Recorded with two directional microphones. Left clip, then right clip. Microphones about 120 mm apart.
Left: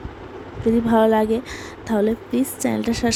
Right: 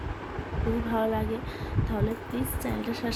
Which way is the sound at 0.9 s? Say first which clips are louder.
Left 12 dB; 90° left.